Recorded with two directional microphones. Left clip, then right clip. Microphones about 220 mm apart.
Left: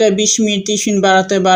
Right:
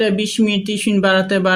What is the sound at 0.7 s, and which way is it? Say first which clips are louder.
Speech: left 4 dB; 10° left (ahead or behind).